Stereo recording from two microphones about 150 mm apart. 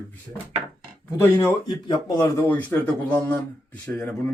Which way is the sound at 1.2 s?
20° left (ahead or behind).